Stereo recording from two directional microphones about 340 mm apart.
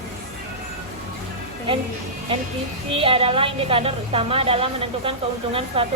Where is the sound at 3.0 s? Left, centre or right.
Centre.